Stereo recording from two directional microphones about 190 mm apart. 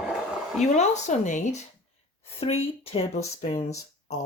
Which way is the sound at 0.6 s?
40° left (ahead or behind).